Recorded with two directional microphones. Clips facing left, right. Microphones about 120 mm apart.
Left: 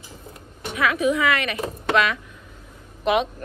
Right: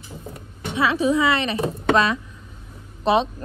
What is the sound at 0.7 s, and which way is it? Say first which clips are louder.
A woman's voice: right 2 dB; 30° right (ahead or behind).